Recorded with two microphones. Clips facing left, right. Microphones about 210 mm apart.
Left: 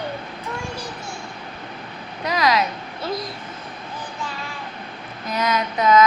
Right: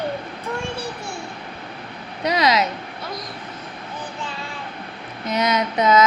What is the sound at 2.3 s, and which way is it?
Speech, 20° right (ahead or behind).